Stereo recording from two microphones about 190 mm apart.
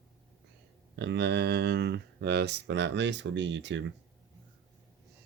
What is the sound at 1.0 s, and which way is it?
Speech, 60° right (ahead or behind).